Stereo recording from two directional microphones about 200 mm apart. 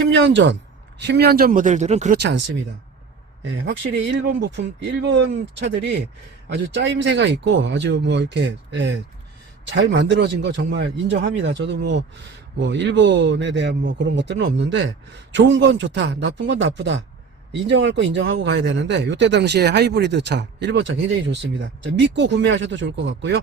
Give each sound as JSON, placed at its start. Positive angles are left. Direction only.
{"t": 0.1, "sound": "speech", "side_deg": -65}
{"t": 2.1, "sound": "speech", "side_deg": -55}
{"t": 3.4, "sound": "speech", "side_deg": -60}